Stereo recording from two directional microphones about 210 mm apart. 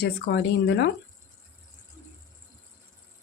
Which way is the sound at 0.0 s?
50° left (ahead or behind).